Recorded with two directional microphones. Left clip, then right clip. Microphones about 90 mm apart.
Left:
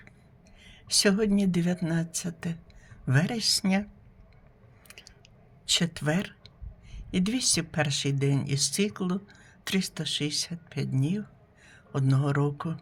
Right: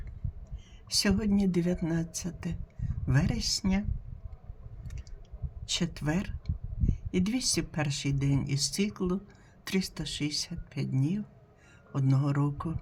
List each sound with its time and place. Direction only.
0.6 s speech: 25° left (ahead or behind)
5.6 s speech: 30° left (ahead or behind)